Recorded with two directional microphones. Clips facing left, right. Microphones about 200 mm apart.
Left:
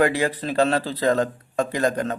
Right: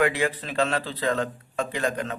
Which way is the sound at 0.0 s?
35° left (ahead or behind).